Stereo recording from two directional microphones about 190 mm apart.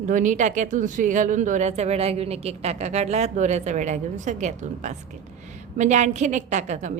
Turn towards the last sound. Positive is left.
turn(degrees=-40)  # may be behind; listen again after turning